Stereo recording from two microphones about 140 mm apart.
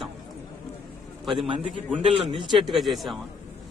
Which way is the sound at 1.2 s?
Centre (ahead or behind).